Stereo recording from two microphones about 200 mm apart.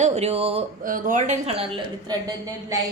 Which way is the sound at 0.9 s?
45° right (ahead or behind).